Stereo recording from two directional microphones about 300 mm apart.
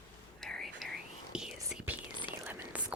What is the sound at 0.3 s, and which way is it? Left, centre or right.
Whispering, centre.